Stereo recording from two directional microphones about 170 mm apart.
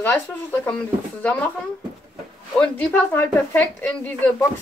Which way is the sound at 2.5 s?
10° left (ahead or behind).